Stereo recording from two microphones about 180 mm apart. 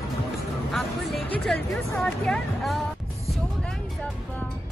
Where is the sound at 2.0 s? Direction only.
Centre (ahead or behind).